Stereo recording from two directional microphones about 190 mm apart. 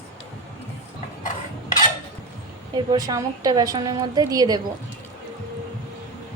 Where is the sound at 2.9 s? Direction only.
20° right (ahead or behind).